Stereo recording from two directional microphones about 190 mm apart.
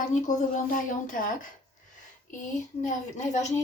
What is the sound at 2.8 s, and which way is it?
Speech, 40° left (ahead or behind).